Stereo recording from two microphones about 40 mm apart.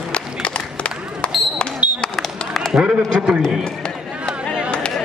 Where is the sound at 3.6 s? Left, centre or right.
Left.